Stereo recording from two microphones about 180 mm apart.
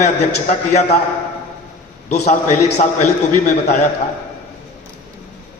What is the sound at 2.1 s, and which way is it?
Speech, 40° left (ahead or behind).